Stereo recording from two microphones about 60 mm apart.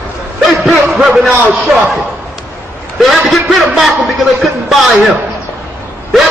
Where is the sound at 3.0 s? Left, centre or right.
Centre.